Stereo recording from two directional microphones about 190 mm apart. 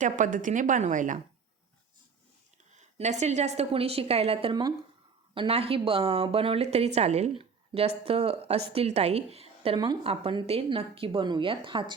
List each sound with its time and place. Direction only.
0.0 s a woman's voice: 45° right (ahead or behind)
2.7 s a woman's voice: 40° right (ahead or behind)